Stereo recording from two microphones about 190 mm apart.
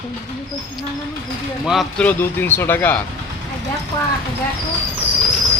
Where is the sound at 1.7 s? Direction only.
Centre (ahead or behind).